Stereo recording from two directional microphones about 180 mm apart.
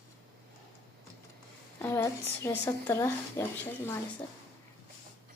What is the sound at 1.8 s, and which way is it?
A woman's voice, 15° left (ahead or behind).